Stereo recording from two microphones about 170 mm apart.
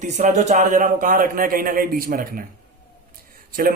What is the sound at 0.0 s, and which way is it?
A man's voice, 45° right (ahead or behind).